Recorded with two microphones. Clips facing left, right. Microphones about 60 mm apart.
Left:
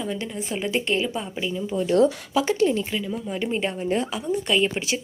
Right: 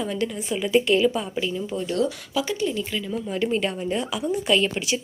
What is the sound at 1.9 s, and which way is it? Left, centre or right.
Speech, left.